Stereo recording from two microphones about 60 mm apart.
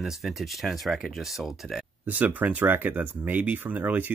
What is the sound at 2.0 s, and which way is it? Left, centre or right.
Speech, right.